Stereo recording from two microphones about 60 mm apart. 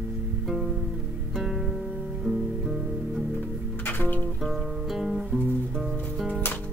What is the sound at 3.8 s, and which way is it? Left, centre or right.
Music, left.